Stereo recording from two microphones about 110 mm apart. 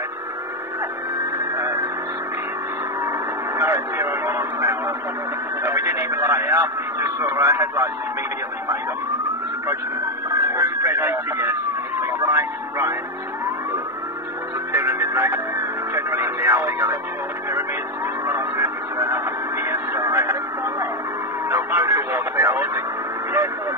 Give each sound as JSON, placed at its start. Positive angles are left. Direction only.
{"t": 1.4, "sound": "radio", "side_deg": -30}
{"t": 3.0, "sound": "radio", "side_deg": -25}
{"t": 10.3, "sound": "speech", "side_deg": -30}
{"t": 12.0, "sound": "vehicle", "side_deg": -25}
{"t": 14.7, "sound": "music", "side_deg": -25}
{"t": 18.2, "sound": "radio", "side_deg": -25}